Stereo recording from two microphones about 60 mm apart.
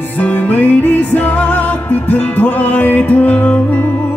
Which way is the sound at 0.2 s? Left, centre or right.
Left.